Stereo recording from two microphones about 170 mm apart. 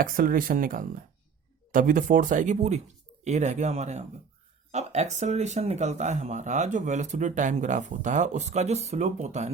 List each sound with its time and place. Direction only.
0.0 s speech: 55° right (ahead or behind)